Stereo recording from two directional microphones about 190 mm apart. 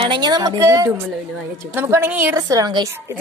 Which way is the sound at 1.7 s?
15° right (ahead or behind).